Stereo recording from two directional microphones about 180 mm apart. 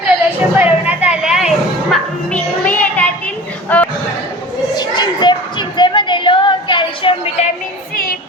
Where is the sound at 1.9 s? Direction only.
5° left (ahead or behind).